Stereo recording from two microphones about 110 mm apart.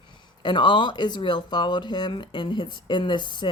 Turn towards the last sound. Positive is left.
turn(degrees=45)  # may be behind; listen again after turning